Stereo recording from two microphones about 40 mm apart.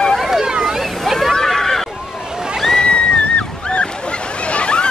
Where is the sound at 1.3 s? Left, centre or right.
Centre.